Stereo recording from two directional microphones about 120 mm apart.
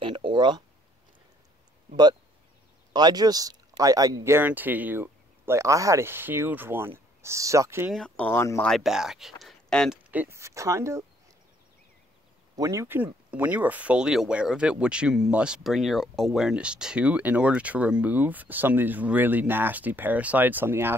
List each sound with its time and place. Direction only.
0.0 s a sound: 40° right (ahead or behind)
2.9 s speech: 35° right (ahead or behind)
7.9 s speech: 5° left (ahead or behind)
8.3 s speech: 20° left (ahead or behind)
8.6 s speech: centre (ahead or behind)
10.1 s speech: 20° right (ahead or behind)
12.5 s speech: 25° right (ahead or behind)